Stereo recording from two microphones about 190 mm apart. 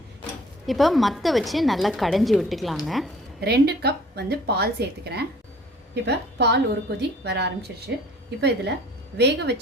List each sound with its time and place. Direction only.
0.7 s a woman's voice: centre (ahead or behind)
3.4 s a woman's voice: 60° right (ahead or behind)